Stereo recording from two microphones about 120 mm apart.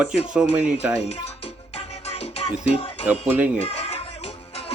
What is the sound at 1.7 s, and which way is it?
Music, 60° left (ahead or behind).